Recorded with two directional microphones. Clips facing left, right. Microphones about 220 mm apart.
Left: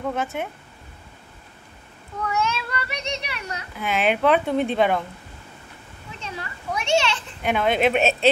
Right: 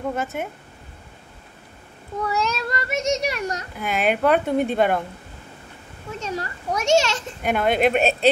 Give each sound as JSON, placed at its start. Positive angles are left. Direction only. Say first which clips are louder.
{"t": 0.1, "sound": "a woman's voice", "louder": "even", "side_deg": 0}
{"t": 2.2, "sound": "speech", "louder": "right 1 dB", "side_deg": -35}
{"t": 3.8, "sound": "a woman's voice", "louder": "even", "side_deg": 0}
{"t": 6.1, "sound": "speech", "louder": "right 6 dB", "side_deg": -40}
{"t": 7.4, "sound": "a woman's voice", "louder": "right 1 dB", "side_deg": 0}